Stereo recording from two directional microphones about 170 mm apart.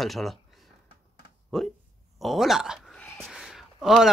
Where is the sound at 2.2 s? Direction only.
Centre (ahead or behind).